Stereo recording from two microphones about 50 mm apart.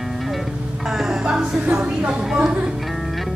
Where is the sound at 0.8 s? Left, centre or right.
Centre.